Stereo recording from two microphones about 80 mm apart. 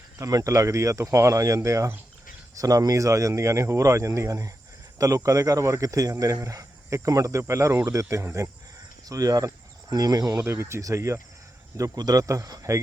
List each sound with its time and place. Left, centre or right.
0.2 s speech: right
9.0 s speech: right
10.4 s speech: right
11.8 s speech: right